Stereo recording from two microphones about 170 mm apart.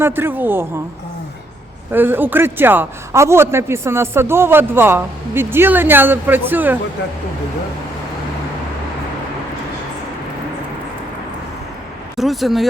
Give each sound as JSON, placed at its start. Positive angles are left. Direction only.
{"t": 0.0, "sound": "a man's voice", "side_deg": -10}
{"t": 1.9, "sound": "a man's voice", "side_deg": -10}
{"t": 12.1, "sound": "speech", "side_deg": 0}